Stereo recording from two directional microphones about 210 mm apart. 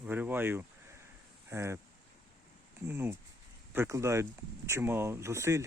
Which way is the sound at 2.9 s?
10° right (ahead or behind).